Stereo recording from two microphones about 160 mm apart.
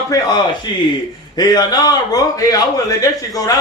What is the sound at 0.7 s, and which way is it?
A man's voice, 30° left (ahead or behind).